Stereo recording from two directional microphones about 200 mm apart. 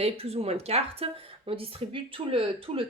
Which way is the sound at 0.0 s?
30° right (ahead or behind).